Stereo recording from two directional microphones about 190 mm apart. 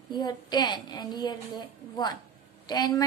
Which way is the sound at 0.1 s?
20° left (ahead or behind).